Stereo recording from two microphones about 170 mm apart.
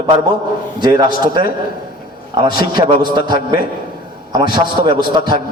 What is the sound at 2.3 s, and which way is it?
A man's voice, 25° right (ahead or behind).